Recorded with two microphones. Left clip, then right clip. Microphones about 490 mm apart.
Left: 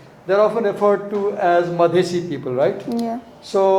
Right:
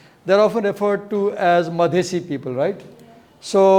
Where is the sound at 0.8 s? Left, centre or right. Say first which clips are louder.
Left 2 dB; right.